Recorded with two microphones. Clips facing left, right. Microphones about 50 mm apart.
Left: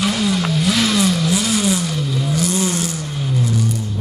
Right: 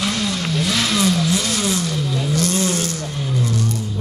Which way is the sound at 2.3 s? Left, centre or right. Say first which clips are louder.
Even; centre.